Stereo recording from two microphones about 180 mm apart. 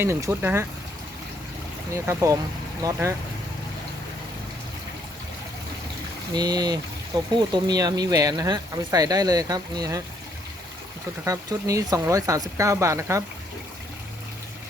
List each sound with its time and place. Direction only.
0.0 s speech: 15° right (ahead or behind)
1.9 s speech: 15° right (ahead or behind)
6.3 s speech: 20° right (ahead or behind)
11.3 s speech: 20° right (ahead or behind)